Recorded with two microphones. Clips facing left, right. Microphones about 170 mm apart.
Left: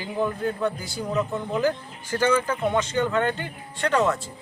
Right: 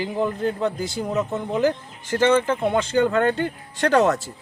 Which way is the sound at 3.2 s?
50° right (ahead or behind).